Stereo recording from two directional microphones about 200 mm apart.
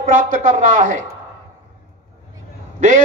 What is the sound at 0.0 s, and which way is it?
Speech, 40° right (ahead or behind).